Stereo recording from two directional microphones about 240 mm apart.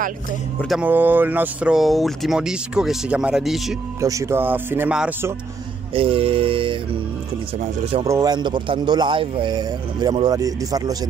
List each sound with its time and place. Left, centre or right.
0.6 s speech: centre
4.0 s speech: centre
5.9 s a sound: right
8.0 s speech: centre